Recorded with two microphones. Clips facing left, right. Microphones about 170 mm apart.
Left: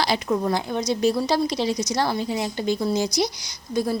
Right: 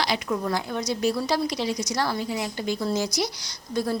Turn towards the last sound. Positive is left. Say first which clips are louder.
# left 2 dB
turn(degrees=15)  # may be behind; listen again after turning